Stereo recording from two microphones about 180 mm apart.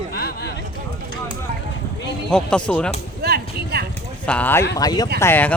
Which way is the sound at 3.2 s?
60° right (ahead or behind).